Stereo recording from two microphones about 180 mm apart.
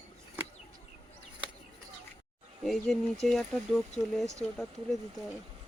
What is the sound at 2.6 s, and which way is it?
Speech, centre (ahead or behind).